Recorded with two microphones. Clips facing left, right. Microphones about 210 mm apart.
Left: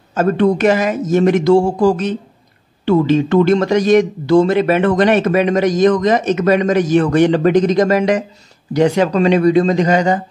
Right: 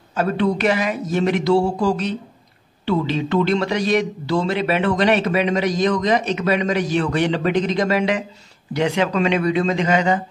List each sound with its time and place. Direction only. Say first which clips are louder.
0.1 s a man's voice: left 6 dB; 45° left (ahead or behind)